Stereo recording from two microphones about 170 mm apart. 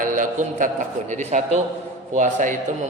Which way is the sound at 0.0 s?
50° right (ahead or behind).